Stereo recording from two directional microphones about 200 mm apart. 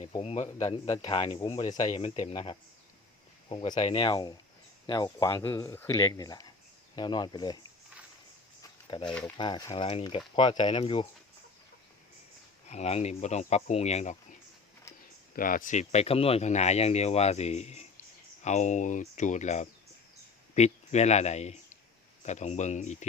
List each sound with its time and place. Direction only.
0.1 s speech: 30° left (ahead or behind)
9.0 s speech: 5° left (ahead or behind)
9.4 s speech: 20° left (ahead or behind)
12.6 s speech: 35° left (ahead or behind)
15.4 s speech: 45° left (ahead or behind)